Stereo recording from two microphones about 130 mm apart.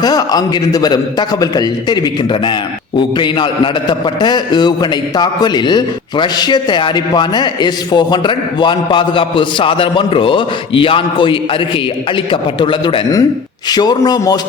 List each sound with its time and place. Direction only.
0.0 s a man's voice: 30° left (ahead or behind)